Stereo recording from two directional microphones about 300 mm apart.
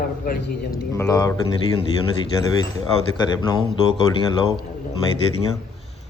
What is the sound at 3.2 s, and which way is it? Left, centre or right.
Speech, centre.